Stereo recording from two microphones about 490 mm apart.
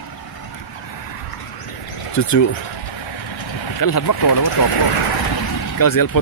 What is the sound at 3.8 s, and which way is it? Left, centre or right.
Speech, left.